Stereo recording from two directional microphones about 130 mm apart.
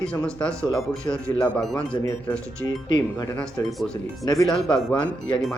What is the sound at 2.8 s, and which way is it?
Speech, 35° left (ahead or behind).